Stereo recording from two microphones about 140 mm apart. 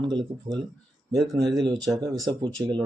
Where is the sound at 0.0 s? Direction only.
35° right (ahead or behind).